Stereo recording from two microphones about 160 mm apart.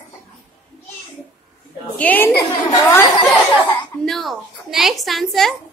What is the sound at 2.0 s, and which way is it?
A woman's voice, 10° left (ahead or behind).